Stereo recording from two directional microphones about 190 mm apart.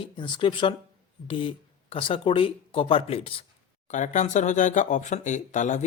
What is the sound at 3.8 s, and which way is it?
Speech, 40° left (ahead or behind).